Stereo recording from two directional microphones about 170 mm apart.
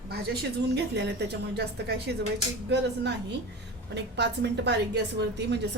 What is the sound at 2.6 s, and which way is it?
A woman's voice, 90° right.